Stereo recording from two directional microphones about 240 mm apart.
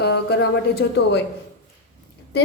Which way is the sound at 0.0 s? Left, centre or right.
Left.